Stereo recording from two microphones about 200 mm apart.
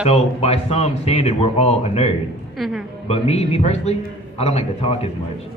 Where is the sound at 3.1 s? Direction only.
30° left (ahead or behind).